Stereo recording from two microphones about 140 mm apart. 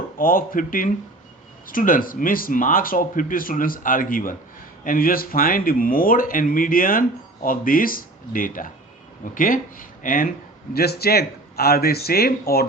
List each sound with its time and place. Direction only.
0.2 s speech: 90° left
10.8 s speech: 90° left